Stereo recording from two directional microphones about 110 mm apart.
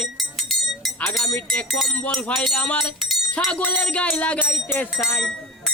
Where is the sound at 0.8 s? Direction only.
Centre (ahead or behind).